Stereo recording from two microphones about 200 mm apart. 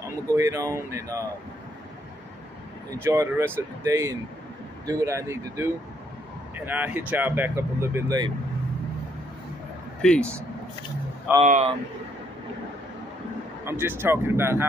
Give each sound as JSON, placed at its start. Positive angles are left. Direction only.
{"t": 0.3, "sound": "speech", "side_deg": -15}
{"t": 3.0, "sound": "speech", "side_deg": -15}
{"t": 10.0, "sound": "speech", "side_deg": 5}
{"t": 11.4, "sound": "speech", "side_deg": -40}
{"t": 13.7, "sound": "speech", "side_deg": -10}